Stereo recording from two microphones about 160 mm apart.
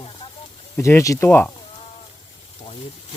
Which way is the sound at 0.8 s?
20° left (ahead or behind).